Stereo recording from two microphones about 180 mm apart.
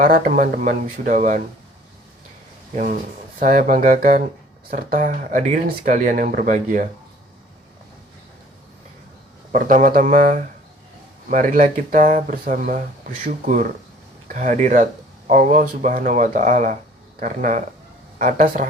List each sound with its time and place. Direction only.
0.0 s speech: 50° right (ahead or behind)
3.4 s speech: 45° right (ahead or behind)
9.5 s speech: 45° right (ahead or behind)